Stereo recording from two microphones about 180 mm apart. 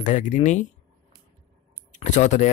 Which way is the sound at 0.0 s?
45° left (ahead or behind).